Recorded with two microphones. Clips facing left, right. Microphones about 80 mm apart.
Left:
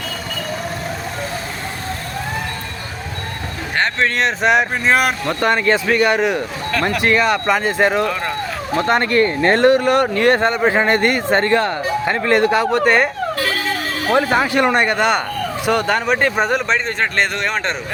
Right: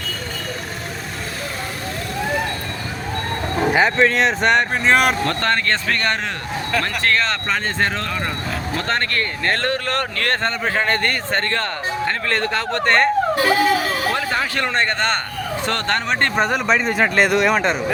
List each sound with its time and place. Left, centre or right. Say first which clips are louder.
3.7 s speech: right 2 dB; centre
13.3 s a sound: right 4 dB; centre
14.1 s speech: left 6 dB; centre